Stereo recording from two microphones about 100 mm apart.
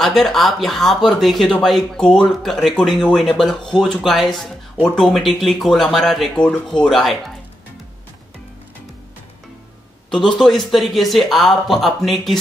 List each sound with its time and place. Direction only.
0.0 s speech: centre (ahead or behind)
10.1 s speech: 5° left (ahead or behind)